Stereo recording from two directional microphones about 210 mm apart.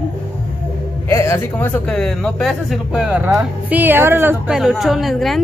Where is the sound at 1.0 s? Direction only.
15° left (ahead or behind).